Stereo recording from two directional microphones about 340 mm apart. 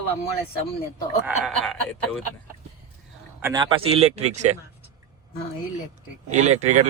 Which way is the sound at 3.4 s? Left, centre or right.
Centre.